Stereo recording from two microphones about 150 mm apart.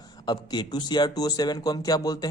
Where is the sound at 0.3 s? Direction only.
30° left (ahead or behind).